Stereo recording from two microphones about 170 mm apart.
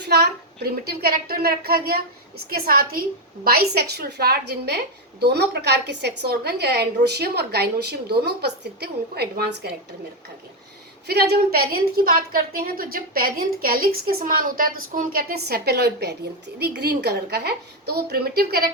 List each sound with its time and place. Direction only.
0.0 s a woman's voice: 75° right (ahead or behind)
11.0 s a woman's voice: 70° right (ahead or behind)